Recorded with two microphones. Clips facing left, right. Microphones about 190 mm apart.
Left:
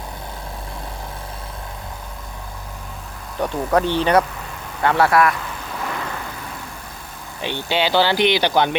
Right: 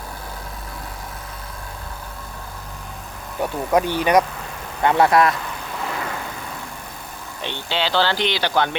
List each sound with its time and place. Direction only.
3.4 s a man's voice: 10° right (ahead or behind)
7.4 s speech: 15° left (ahead or behind)